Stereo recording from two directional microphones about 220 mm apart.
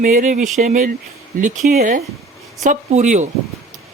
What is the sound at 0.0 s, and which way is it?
Speech, 35° right (ahead or behind).